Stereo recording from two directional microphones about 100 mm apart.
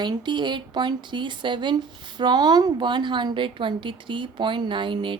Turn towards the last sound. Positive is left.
turn(degrees=-60)  # may be behind; listen again after turning